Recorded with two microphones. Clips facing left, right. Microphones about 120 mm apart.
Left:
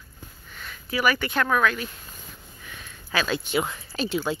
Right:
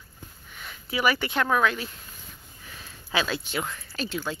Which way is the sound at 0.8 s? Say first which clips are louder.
Left 1 dB; 25° right (ahead or behind).